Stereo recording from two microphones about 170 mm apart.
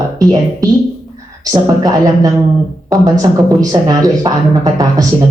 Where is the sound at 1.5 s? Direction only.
20° right (ahead or behind).